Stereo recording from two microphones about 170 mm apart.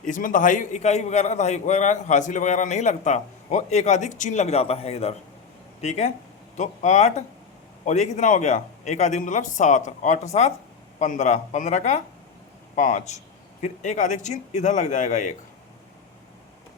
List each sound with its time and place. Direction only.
0.0 s a man's voice: 50° left (ahead or behind)